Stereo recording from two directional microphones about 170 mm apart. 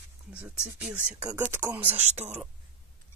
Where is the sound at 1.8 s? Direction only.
40° right (ahead or behind).